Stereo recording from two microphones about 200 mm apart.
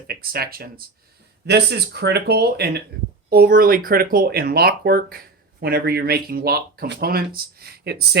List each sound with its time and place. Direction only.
0.1 s speech: 50° right (ahead or behind)